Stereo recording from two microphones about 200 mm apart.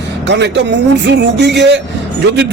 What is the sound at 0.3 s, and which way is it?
A man's voice, 60° right (ahead or behind).